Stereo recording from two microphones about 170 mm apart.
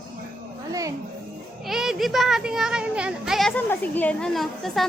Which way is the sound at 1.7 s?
Centre (ahead or behind).